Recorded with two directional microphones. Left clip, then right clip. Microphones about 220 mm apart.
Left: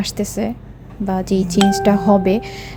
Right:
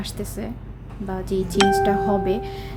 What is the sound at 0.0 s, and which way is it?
A woman's voice, 30° left (ahead or behind).